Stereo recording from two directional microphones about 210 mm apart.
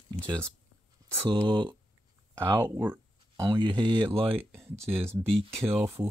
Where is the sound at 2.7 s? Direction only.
15° right (ahead or behind).